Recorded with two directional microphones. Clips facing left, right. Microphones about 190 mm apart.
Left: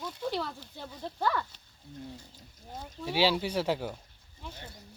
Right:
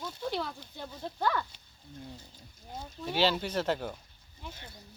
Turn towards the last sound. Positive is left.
turn(degrees=10)  # may be behind; listen again after turning